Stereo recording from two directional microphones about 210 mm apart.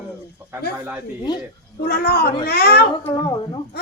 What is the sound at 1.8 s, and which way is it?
Speech, 45° left (ahead or behind).